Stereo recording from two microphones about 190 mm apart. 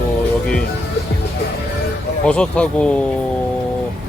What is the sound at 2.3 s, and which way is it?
Speech, 5° left (ahead or behind).